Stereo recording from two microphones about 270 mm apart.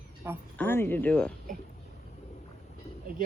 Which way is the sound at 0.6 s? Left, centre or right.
Centre.